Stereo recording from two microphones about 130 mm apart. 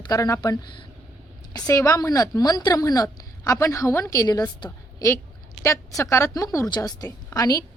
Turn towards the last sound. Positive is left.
turn(degrees=25)  # may be behind; listen again after turning